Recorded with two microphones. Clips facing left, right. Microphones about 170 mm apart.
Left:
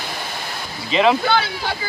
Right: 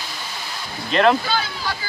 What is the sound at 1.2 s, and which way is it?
Speech, 65° left (ahead or behind).